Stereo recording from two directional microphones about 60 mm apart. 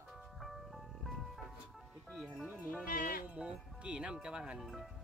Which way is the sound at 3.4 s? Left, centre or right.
Centre.